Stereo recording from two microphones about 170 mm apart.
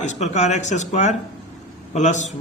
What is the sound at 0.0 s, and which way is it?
A man's voice, 45° left (ahead or behind).